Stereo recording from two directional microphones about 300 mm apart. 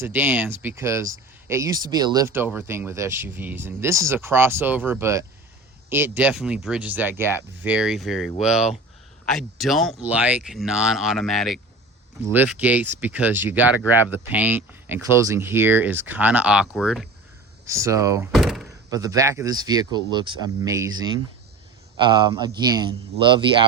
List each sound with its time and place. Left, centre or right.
0.0 s speech: centre
18.9 s speech: centre